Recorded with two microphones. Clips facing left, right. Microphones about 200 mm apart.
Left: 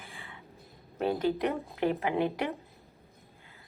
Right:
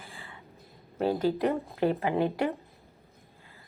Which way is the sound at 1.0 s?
30° right (ahead or behind).